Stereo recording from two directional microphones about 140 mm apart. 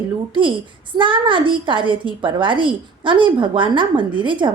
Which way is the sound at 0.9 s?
35° right (ahead or behind).